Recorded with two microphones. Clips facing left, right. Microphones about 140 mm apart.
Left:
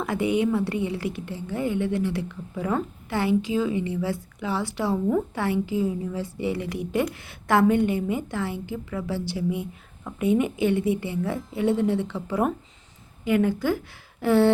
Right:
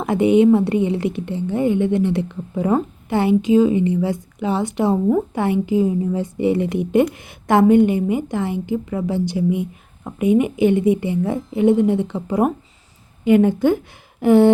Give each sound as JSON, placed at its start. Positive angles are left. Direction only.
{"t": 0.0, "sound": "a woman's voice", "side_deg": -20}